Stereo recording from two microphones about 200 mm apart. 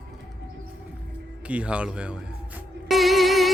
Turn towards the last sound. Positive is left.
turn(degrees=0)  # may be behind; listen again after turning